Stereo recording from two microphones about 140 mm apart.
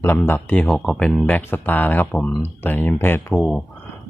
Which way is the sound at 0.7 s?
Centre (ahead or behind).